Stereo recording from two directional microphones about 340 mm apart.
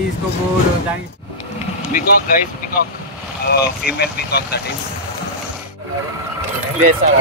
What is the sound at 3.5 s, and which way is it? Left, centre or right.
Speech, left.